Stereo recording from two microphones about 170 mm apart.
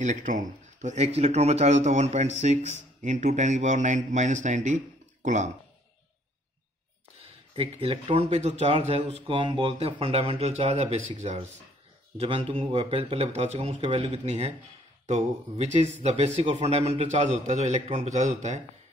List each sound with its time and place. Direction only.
0.0 s a man's voice: 45° right (ahead or behind)
7.5 s a man's voice: 35° right (ahead or behind)